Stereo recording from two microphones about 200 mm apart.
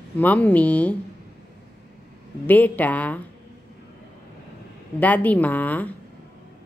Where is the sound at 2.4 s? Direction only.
10° left (ahead or behind).